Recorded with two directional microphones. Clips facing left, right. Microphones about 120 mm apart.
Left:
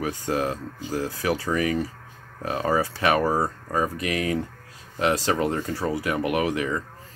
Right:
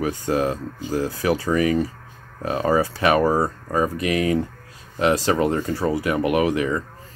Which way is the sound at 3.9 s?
10° right (ahead or behind).